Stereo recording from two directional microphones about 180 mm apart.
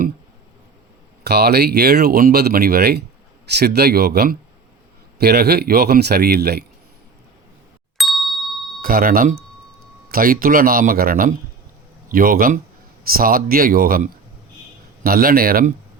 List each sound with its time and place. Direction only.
1.2 s speech: 65° right (ahead or behind)
7.9 s ding: centre (ahead or behind)
8.8 s speech: 55° right (ahead or behind)